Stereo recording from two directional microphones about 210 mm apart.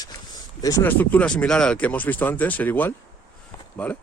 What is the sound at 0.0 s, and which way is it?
Speech, 15° left (ahead or behind).